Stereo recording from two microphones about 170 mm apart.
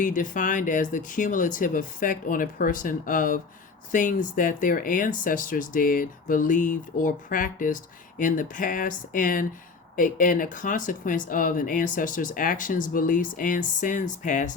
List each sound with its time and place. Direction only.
0.0 s speech: 50° left (ahead or behind)